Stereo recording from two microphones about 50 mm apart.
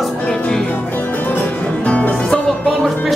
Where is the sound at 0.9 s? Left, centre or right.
Left.